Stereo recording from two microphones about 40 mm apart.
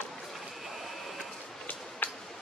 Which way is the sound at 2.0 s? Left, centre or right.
Left.